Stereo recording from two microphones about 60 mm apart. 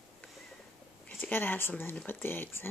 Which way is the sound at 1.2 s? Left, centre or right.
Left.